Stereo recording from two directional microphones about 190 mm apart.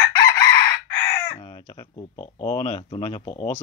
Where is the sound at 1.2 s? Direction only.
20° left (ahead or behind).